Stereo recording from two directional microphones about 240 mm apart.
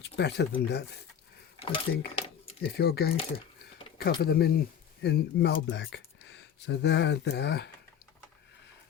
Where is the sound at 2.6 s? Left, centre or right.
Left.